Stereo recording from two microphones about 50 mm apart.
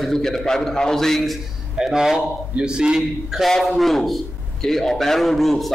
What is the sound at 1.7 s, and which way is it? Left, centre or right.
A man's voice, centre.